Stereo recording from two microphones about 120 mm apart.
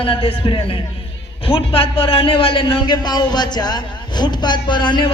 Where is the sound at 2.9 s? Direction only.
35° left (ahead or behind).